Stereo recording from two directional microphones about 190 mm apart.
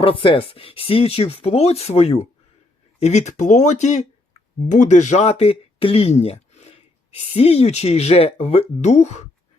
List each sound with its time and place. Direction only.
0.0 s speech: 30° left (ahead or behind)